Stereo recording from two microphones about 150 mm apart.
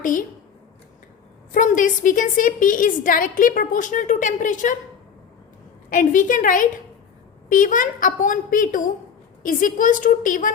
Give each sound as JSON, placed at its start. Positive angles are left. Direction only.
{"t": 0.0, "sound": "a woman's voice", "side_deg": 60}
{"t": 1.5, "sound": "a woman's voice", "side_deg": 60}
{"t": 5.9, "sound": "a woman's voice", "side_deg": 60}